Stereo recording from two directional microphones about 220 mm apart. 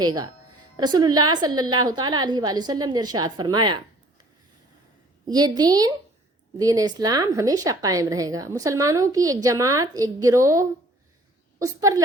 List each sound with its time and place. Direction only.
0.0 s a woman's voice: 20° right (ahead or behind)
5.3 s a woman's voice: 20° right (ahead or behind)